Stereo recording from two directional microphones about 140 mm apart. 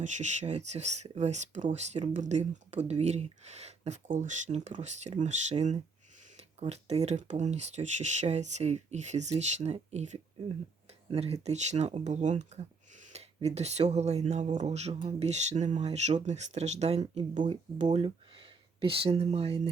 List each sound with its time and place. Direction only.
0.0 s speech: 55° right (ahead or behind)
17.9 s speech: 40° right (ahead or behind)